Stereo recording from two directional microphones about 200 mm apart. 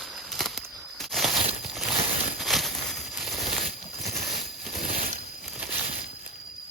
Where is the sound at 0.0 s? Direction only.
Centre (ahead or behind).